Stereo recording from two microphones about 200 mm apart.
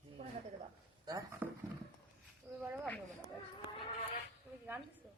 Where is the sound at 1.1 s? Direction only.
15° right (ahead or behind).